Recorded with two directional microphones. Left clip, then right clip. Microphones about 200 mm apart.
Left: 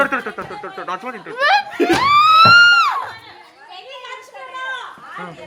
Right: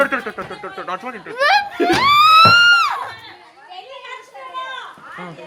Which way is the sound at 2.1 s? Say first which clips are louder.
Right 1 dB; 45° right (ahead or behind).